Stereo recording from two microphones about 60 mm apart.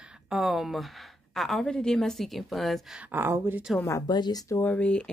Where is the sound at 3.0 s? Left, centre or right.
Right.